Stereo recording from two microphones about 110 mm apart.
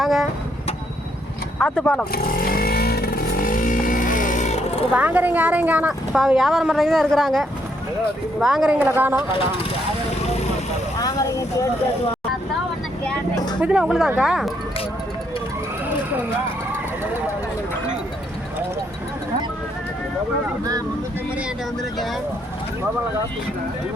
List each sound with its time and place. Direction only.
0.0 s vehicle: centre (ahead or behind)
1.5 s speech: 10° left (ahead or behind)
4.4 s a sound: 75° left (ahead or behind)
4.9 s a woman's voice: 15° right (ahead or behind)
13.3 s a sound: 40° left (ahead or behind)
13.6 s a woman's voice: 10° right (ahead or behind)